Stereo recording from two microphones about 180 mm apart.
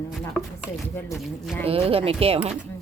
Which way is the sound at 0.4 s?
Centre (ahead or behind).